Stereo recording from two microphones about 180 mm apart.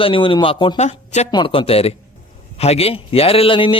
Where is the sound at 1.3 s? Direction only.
25° left (ahead or behind).